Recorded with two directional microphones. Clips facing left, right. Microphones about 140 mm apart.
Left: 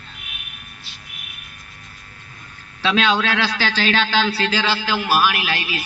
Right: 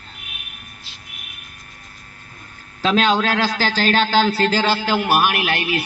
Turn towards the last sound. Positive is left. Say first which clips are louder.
# right 4 dB
turn(degrees=-55)  # may be behind; listen again after turning